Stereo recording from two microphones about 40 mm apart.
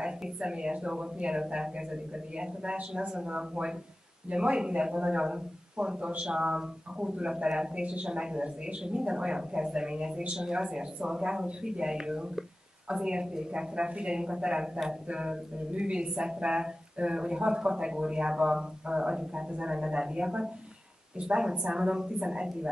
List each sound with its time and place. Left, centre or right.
0.0 s speech: right